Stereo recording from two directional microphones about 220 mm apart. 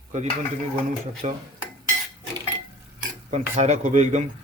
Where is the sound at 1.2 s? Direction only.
30° right (ahead or behind).